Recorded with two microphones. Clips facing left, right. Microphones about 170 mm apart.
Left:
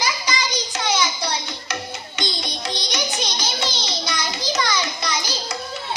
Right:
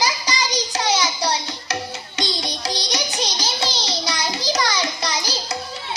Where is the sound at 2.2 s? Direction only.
35° right (ahead or behind).